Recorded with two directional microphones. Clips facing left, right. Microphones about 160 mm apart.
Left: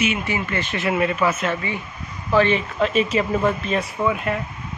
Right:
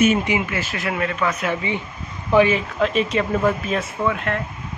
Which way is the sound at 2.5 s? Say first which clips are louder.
Even; centre (ahead or behind).